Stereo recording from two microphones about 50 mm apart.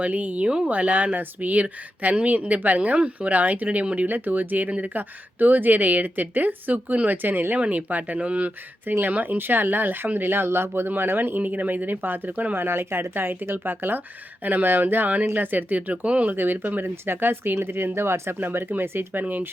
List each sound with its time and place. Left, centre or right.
0.0 s speech: right
12.5 s speech: right
16.3 s speech: right
18.3 s speech: right